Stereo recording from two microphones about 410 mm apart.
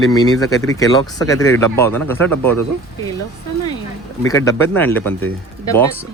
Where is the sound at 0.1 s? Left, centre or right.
Centre.